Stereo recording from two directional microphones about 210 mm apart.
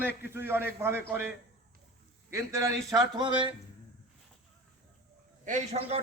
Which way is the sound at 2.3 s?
15° right (ahead or behind).